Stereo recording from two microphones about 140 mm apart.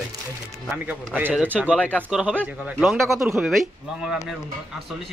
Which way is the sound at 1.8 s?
10° left (ahead or behind).